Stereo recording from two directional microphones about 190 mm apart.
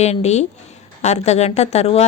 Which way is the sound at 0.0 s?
35° left (ahead or behind).